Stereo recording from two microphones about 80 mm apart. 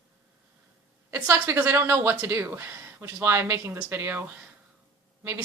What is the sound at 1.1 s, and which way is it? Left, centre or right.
Speech, right.